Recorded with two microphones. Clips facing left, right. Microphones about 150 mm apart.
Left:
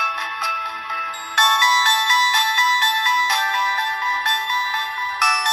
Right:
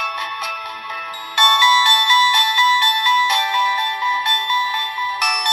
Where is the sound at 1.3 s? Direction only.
30° right (ahead or behind).